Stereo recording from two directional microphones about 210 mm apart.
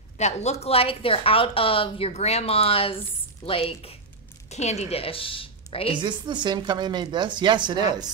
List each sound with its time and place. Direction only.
0.2 s a woman's voice: 30° left (ahead or behind)
5.9 s a woman's voice: 20° right (ahead or behind)